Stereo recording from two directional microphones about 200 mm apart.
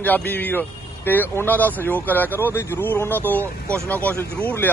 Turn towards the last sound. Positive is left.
turn(degrees=10)  # may be behind; listen again after turning